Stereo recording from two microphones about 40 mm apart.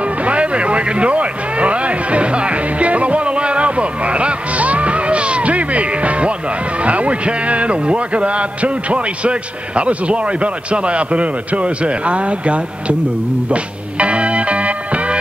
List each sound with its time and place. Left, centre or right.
0.0 s music: right
6.8 s a man's voice: right
13.5 s music: right